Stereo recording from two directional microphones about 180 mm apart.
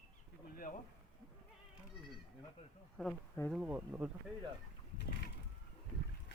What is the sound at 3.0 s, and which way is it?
Speech, centre (ahead or behind).